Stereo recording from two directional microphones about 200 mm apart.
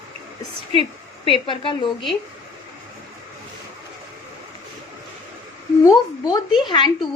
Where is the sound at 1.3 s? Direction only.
25° left (ahead or behind).